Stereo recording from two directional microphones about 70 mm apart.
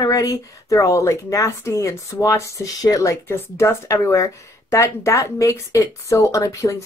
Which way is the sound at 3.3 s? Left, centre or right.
Left.